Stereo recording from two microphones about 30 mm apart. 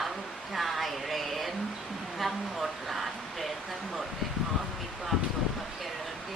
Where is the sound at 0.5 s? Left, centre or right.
Centre.